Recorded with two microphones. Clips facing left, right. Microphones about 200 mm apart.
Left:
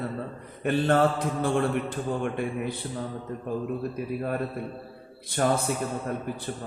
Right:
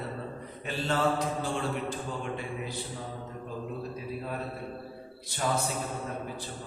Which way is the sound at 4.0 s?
60° left (ahead or behind).